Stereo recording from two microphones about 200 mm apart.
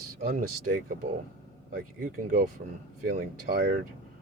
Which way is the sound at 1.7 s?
45° right (ahead or behind).